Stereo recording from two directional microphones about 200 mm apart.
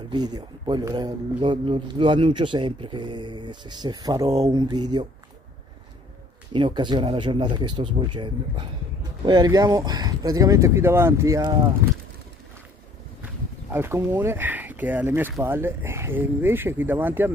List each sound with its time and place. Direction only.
0.1 s speech: 20° right (ahead or behind)
6.5 s speech: 25° right (ahead or behind)
13.2 s speech: 10° right (ahead or behind)